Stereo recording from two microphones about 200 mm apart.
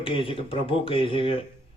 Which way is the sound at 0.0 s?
25° left (ahead or behind).